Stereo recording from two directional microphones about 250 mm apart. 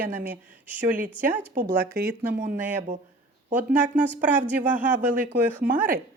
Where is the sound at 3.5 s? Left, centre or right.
Centre.